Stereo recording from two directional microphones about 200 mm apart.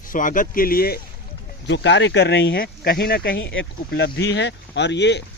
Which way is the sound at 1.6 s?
65° left (ahead or behind).